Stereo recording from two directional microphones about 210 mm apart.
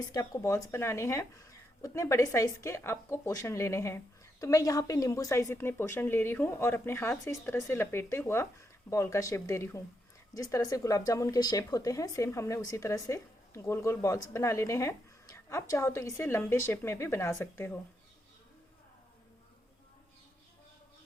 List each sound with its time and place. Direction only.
0.1 s speech: 15° left (ahead or behind)